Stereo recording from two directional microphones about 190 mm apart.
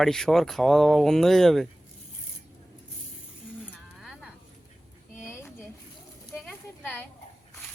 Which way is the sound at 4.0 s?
Centre (ahead or behind).